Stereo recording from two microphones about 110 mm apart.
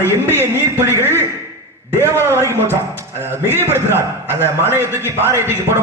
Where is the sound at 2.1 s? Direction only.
20° left (ahead or behind).